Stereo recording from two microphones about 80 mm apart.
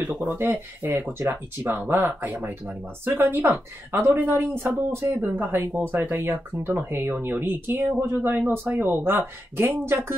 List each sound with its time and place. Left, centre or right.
0.4 s speech: right